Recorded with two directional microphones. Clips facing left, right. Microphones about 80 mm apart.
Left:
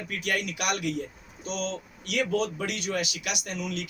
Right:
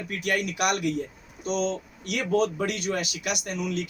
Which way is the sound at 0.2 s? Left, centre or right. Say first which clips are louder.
Right 4 dB; right.